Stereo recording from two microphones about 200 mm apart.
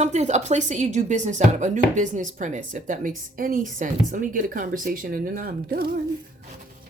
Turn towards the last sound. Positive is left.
turn(degrees=-50)  # may be behind; listen again after turning